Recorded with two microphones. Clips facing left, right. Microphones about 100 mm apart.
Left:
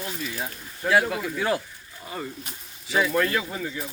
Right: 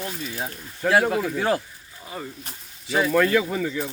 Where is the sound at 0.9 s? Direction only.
45° right (ahead or behind).